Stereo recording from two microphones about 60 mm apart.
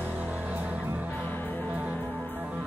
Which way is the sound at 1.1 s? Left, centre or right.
Left.